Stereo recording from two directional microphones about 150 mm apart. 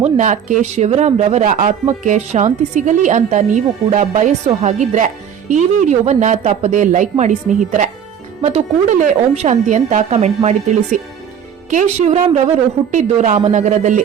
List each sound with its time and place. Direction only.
0.0 s a woman's voice: 55° right (ahead or behind)